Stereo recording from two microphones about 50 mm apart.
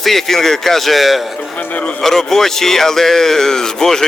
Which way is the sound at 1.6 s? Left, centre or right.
Left.